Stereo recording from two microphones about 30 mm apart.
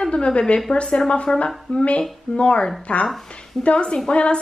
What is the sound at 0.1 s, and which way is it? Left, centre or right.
A woman's voice, left.